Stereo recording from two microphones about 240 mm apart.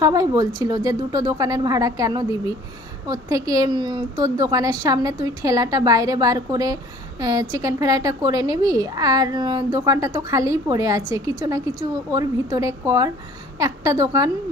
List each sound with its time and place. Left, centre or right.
0.0 s a woman's voice: centre